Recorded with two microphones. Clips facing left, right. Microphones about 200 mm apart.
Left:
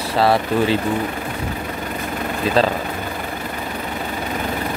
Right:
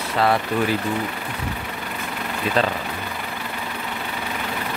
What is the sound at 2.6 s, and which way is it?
Speech, 35° left (ahead or behind).